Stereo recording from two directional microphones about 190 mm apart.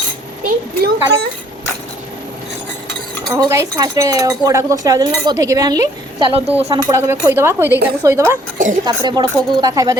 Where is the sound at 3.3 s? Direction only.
15° right (ahead or behind).